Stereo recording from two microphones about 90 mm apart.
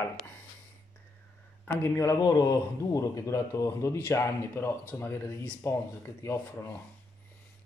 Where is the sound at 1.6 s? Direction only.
30° left (ahead or behind).